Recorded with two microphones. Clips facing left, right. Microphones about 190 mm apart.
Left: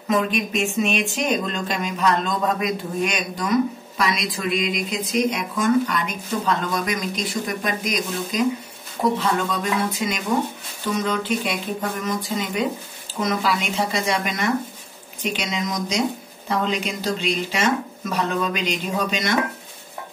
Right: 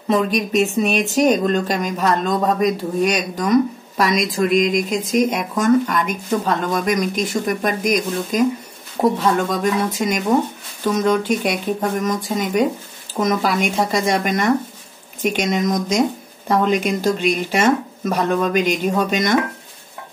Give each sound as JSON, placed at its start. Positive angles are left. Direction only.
{"t": 0.1, "sound": "speech", "side_deg": -40}